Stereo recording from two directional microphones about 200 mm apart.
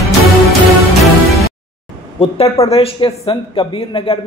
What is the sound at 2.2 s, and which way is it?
A man's voice, 30° left (ahead or behind).